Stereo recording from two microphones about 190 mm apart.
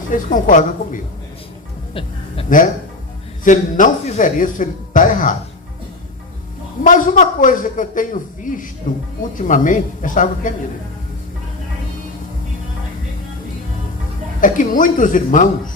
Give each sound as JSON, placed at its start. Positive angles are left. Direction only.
{"t": 0.1, "sound": "speech", "side_deg": 45}
{"t": 1.9, "sound": "music", "side_deg": 30}
{"t": 2.5, "sound": "speech", "side_deg": 45}
{"t": 6.8, "sound": "speech", "side_deg": 45}
{"t": 14.4, "sound": "speech", "side_deg": 45}